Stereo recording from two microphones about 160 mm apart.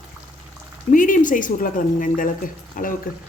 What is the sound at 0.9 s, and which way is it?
Speech, 55° left (ahead or behind).